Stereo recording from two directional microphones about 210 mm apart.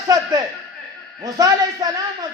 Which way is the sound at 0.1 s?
15° right (ahead or behind).